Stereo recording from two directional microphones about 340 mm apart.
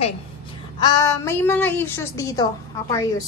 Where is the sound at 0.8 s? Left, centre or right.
Centre.